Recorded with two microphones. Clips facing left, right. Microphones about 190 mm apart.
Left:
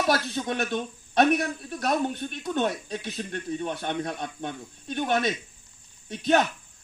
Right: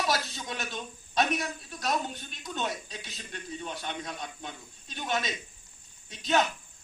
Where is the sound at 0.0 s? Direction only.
60° left (ahead or behind).